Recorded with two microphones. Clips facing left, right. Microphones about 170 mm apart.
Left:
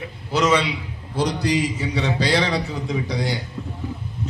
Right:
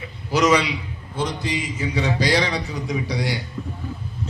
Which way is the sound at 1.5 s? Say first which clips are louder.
Left 6 dB; 40° left (ahead or behind).